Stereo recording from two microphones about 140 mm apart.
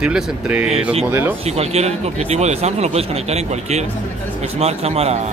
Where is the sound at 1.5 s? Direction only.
50° right (ahead or behind).